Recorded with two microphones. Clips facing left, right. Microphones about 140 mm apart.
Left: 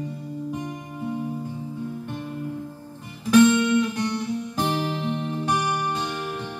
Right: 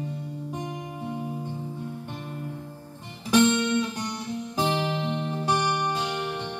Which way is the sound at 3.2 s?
20° right (ahead or behind).